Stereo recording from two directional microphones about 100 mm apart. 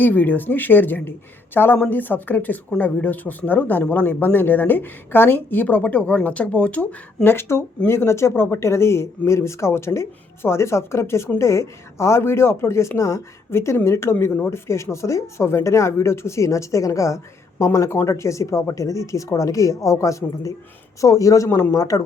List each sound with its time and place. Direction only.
0.0 s speech: 20° left (ahead or behind)
7.3 s speech: 25° left (ahead or behind)